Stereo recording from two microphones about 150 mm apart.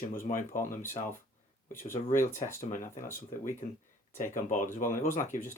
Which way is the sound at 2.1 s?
55° left (ahead or behind).